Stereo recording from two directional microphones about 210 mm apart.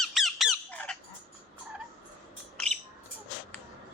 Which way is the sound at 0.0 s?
Centre (ahead or behind).